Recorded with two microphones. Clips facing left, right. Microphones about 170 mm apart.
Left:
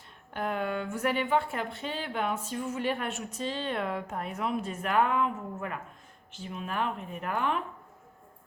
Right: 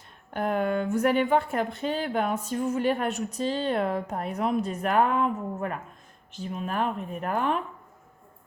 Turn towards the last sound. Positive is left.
turn(degrees=-40)  # may be behind; listen again after turning